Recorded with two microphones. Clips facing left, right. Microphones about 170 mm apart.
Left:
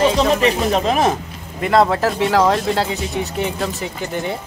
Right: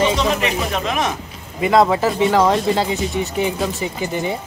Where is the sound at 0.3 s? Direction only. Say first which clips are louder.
Left 4 dB; 35° left (ahead or behind).